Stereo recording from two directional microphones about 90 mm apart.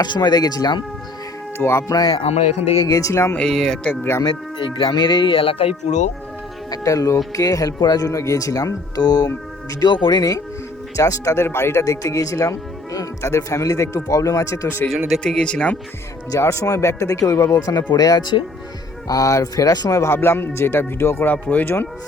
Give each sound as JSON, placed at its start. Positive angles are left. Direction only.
{"t": 0.0, "sound": "speech", "side_deg": 50}
{"t": 1.5, "sound": "speech", "side_deg": 30}
{"t": 1.9, "sound": "speech", "side_deg": 50}
{"t": 3.3, "sound": "speech", "side_deg": 5}
{"t": 4.2, "sound": "speech", "side_deg": 60}
{"t": 6.7, "sound": "speech", "side_deg": 40}
{"t": 15.2, "sound": "speech", "side_deg": 10}
{"t": 16.3, "sound": "speech", "side_deg": 35}
{"t": 19.0, "sound": "speech", "side_deg": 40}
{"t": 20.0, "sound": "speech", "side_deg": 25}